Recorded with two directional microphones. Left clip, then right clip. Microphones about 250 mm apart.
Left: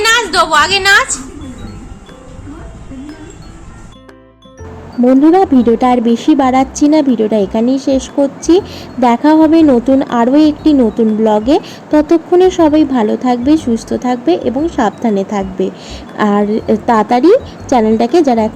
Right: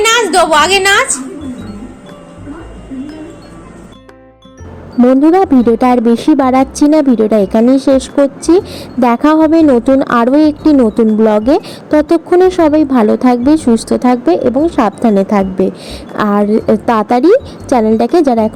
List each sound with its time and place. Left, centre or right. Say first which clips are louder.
0.0 s a woman's voice: right 2 dB; centre
5.0 s a woman's voice: even; centre
13.7 s speech: right 4 dB; centre
14.0 s a woman's voice: right 1 dB; centre